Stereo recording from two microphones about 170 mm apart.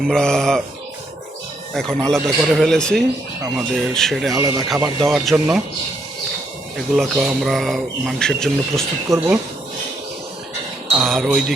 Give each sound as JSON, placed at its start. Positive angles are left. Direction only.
{"t": 0.0, "sound": "speech", "side_deg": 5}
{"t": 1.7, "sound": "speech", "side_deg": 5}
{"t": 4.4, "sound": "speech", "side_deg": -20}
{"t": 4.9, "sound": "speech", "side_deg": 0}
{"t": 6.7, "sound": "speech", "side_deg": 0}
{"t": 9.0, "sound": "speech", "side_deg": -15}
{"t": 11.0, "sound": "speech", "side_deg": 0}